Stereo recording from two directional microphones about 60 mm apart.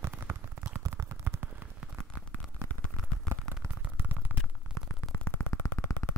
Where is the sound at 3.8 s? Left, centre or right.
Right.